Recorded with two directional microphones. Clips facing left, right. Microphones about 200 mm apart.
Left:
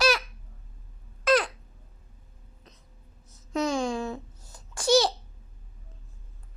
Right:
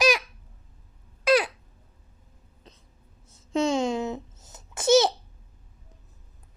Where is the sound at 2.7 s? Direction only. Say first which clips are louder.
Right 3 dB; 30° right (ahead or behind).